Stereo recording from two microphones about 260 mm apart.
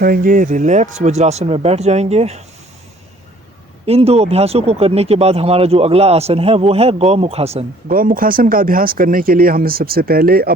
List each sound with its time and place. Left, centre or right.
0.0 s speech: right
3.8 s speech: right